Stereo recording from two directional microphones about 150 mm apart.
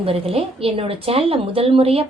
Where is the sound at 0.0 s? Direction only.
40° right (ahead or behind).